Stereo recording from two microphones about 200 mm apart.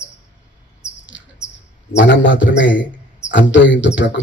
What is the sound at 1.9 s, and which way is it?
Speech, 65° left (ahead or behind).